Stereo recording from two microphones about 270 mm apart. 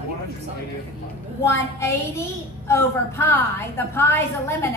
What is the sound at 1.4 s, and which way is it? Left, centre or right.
A woman's voice, centre.